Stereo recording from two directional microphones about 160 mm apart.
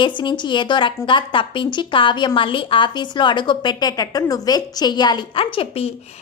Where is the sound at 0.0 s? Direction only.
30° left (ahead or behind).